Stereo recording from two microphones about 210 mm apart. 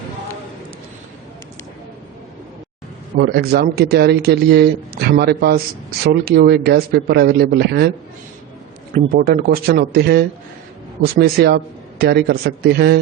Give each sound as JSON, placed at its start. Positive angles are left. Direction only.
{"t": 3.2, "sound": "speech", "side_deg": -50}
{"t": 9.1, "sound": "speech", "side_deg": -45}